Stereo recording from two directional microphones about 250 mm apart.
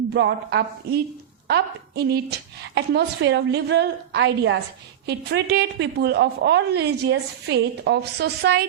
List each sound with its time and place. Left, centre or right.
0.1 s a woman's voice: right